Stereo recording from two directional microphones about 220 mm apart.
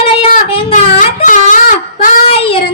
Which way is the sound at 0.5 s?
25° left (ahead or behind).